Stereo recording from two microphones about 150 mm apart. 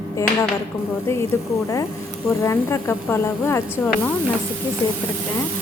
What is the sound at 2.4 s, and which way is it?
A woman's voice, 20° left (ahead or behind).